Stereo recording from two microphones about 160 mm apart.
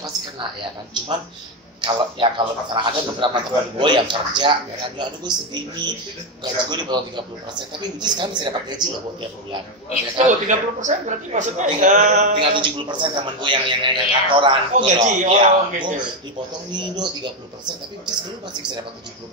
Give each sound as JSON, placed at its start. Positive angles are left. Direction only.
{"t": 1.8, "sound": "a man's voice", "side_deg": -30}
{"t": 10.1, "sound": "speech", "side_deg": -50}
{"t": 12.4, "sound": "a man's voice", "side_deg": -30}
{"t": 14.9, "sound": "speech", "side_deg": -50}
{"t": 15.3, "sound": "a man's voice", "side_deg": -30}